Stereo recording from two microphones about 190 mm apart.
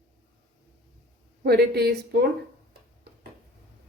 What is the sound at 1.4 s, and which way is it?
Speech, 55° right (ahead or behind).